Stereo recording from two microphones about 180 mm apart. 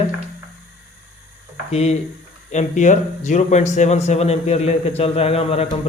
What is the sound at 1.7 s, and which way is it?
Speech, 35° left (ahead or behind).